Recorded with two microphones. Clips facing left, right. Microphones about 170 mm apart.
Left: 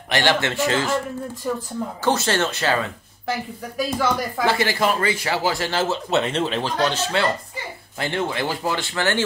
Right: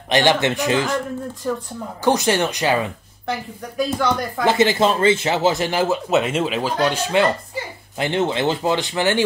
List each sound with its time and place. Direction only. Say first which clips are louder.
0.1 s speech: right 4 dB; 20° right (ahead or behind)
1.4 s speech: right 2 dB; 5° left (ahead or behind)
2.0 s speech: right 4 dB; 15° right (ahead or behind)
3.3 s speech: even; 5° left (ahead or behind)
4.5 s speech: right 5 dB; 20° right (ahead or behind)